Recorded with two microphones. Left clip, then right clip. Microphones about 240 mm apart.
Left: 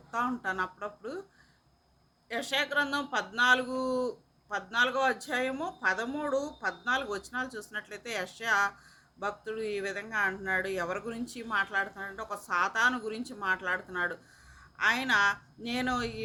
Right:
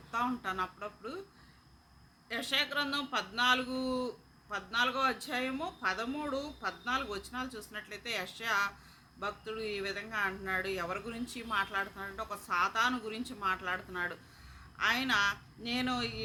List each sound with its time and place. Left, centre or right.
0.1 s speech: centre
2.3 s speech: centre